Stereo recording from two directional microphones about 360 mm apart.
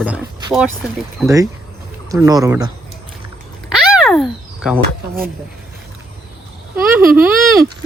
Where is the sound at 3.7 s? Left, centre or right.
Centre.